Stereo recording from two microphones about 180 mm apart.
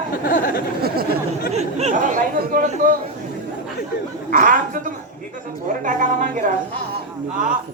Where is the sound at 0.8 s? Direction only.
60° right (ahead or behind).